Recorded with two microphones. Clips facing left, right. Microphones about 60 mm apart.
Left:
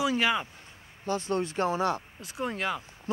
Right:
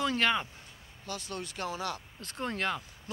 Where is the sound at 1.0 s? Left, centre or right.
Left.